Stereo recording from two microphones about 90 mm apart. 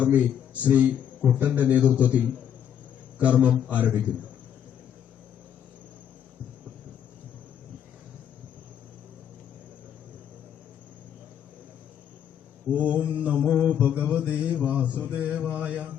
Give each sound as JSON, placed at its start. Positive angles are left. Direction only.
{"t": 0.0, "sound": "a man's voice", "side_deg": -15}
{"t": 1.4, "sound": "mantra", "side_deg": -15}
{"t": 3.2, "sound": "mantra", "side_deg": -15}
{"t": 12.7, "sound": "mantra", "side_deg": -15}